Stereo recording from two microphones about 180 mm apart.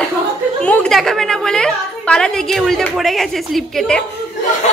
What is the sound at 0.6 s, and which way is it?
A woman's voice, 5° left (ahead or behind).